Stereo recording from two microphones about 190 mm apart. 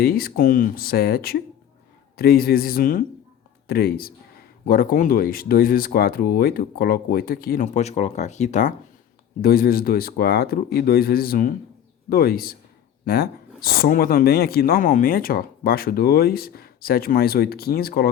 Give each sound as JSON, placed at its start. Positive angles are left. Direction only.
{"t": 0.0, "sound": "speech", "side_deg": 50}
{"t": 9.4, "sound": "speech", "side_deg": 50}
{"t": 13.6, "sound": "speech", "side_deg": 50}